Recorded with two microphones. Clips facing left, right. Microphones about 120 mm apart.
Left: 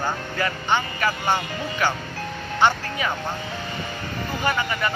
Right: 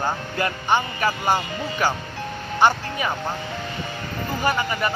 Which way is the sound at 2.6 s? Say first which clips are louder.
Right 1 dB; 10° right (ahead or behind).